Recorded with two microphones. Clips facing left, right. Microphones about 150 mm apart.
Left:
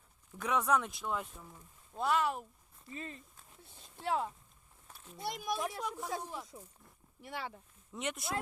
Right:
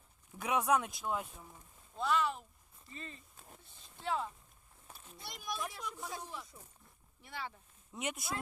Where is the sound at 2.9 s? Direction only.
65° left (ahead or behind).